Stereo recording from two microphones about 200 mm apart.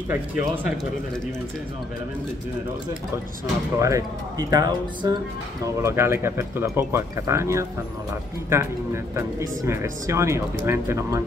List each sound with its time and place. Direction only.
0.1 s speech: 10° right (ahead or behind)
3.8 s speech: 15° right (ahead or behind)